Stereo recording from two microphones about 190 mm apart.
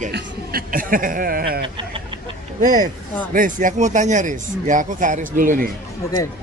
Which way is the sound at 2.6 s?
45° right (ahead or behind).